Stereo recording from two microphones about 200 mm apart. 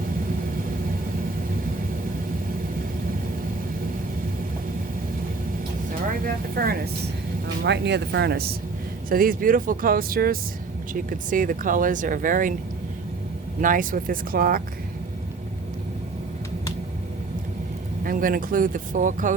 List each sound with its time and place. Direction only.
5.9 s speech: 45° right (ahead or behind)
7.6 s speech: 60° right (ahead or behind); by 12.5 s 40° right (ahead or behind)
13.6 s speech: 40° right (ahead or behind)
18.0 s speech: 45° right (ahead or behind)